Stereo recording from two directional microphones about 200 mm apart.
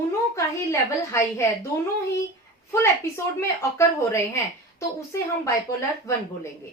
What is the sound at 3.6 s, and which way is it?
A woman's voice, 15° left (ahead or behind).